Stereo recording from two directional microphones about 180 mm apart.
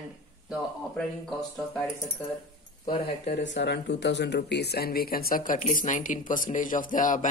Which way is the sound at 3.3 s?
75° left (ahead or behind).